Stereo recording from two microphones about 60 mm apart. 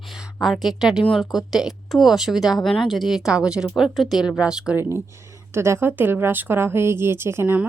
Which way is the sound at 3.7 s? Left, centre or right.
Centre.